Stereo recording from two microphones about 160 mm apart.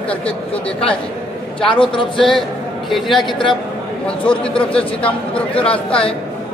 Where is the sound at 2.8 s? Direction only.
Centre (ahead or behind).